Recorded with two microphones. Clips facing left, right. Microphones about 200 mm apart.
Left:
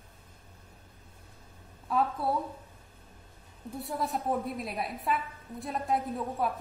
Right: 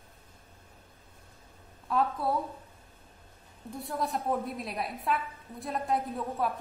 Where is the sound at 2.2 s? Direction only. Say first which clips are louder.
Even; 25° left (ahead or behind).